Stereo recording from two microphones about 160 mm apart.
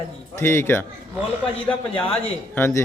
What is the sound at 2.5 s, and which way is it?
Speech, 15° left (ahead or behind).